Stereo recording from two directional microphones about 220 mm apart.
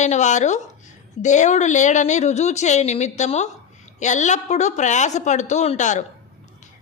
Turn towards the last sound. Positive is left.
turn(degrees=35)  # may be behind; listen again after turning